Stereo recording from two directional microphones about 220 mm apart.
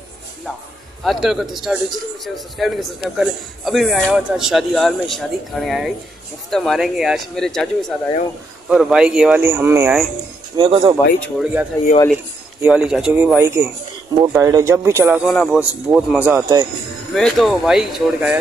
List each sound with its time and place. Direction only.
1.0 s a man's voice: centre (ahead or behind)
10.5 s speech: 20° right (ahead or behind)
11.1 s a man's voice: 5° right (ahead or behind)
12.6 s a man's voice: 5° right (ahead or behind)
15.2 s a man's voice: centre (ahead or behind)
17.1 s a man's voice: centre (ahead or behind)